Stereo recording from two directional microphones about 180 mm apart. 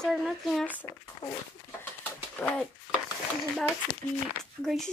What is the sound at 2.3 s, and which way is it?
Bird, 5° left (ahead or behind).